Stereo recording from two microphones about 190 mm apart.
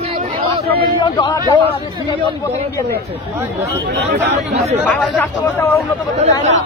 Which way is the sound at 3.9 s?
65° right (ahead or behind).